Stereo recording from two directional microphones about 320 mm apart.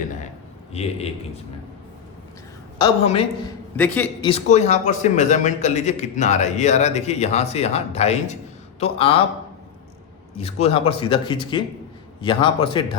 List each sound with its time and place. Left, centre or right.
0.7 s a man's voice: centre
2.7 s speech: centre
3.8 s a man's voice: centre
4.3 s a man's voice: centre
10.3 s speech: centre